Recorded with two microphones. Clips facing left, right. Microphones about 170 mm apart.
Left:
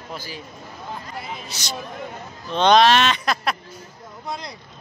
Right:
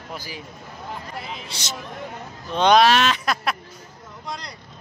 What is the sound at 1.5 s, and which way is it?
Speech, 25° right (ahead or behind).